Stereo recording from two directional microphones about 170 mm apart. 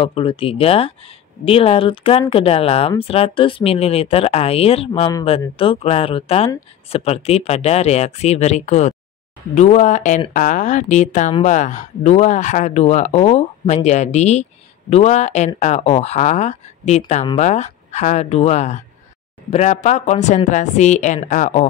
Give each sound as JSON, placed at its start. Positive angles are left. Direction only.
{"t": 0.0, "sound": "a woman's voice", "side_deg": 30}